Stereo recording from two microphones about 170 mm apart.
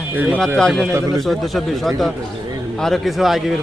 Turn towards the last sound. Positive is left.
turn(degrees=0)  # may be behind; listen again after turning